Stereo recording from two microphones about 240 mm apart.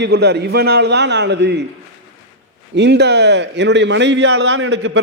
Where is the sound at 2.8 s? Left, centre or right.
Right.